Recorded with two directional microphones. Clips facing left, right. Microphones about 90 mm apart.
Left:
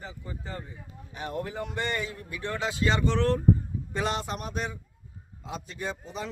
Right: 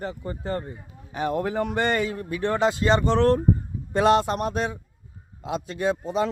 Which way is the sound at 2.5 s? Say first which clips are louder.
Right 7 dB; 40° right (ahead or behind).